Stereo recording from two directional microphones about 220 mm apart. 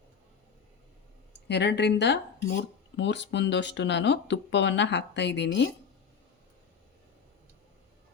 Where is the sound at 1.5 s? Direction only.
50° left (ahead or behind).